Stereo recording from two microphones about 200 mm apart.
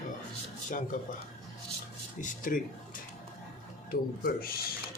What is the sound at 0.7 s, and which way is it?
Speech, 40° left (ahead or behind).